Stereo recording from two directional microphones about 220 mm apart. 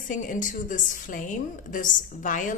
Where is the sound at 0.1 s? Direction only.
35° left (ahead or behind).